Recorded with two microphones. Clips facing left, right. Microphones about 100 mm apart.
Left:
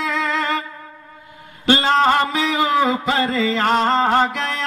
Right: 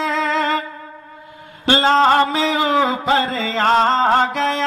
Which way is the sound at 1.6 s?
30° right (ahead or behind).